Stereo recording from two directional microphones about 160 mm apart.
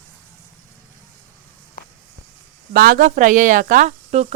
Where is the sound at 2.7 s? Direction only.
65° right (ahead or behind); by 4.2 s 45° right (ahead or behind).